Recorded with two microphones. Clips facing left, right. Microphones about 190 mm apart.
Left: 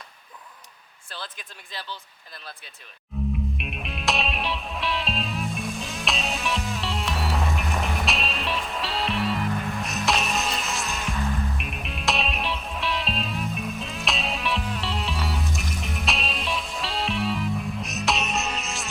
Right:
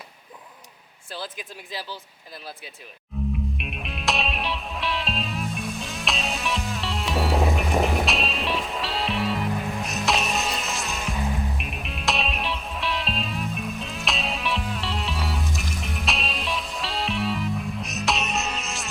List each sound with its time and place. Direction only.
1.1 s speech: 5° right (ahead or behind)
3.1 s music: centre (ahead or behind)
9.5 s music: 15° right (ahead or behind)
9.8 s music: centre (ahead or behind)
11.1 s music: 15° right (ahead or behind)
11.5 s music: centre (ahead or behind)